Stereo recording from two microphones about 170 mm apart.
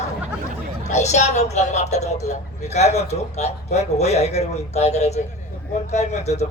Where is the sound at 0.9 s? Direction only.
40° left (ahead or behind).